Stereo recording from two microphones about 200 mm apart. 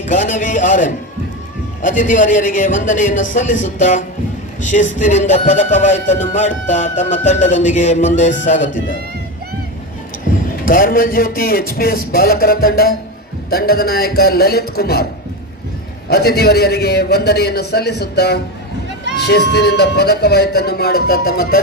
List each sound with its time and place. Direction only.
0.1 s music: 40° left (ahead or behind)
10.7 s speech: 45° left (ahead or behind)
16.0 s a man's voice: 55° left (ahead or behind)